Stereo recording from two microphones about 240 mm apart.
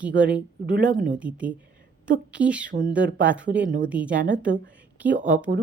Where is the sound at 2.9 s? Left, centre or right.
Centre.